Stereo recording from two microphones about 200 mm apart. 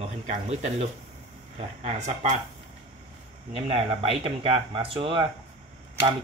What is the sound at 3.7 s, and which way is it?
Speech, 30° right (ahead or behind).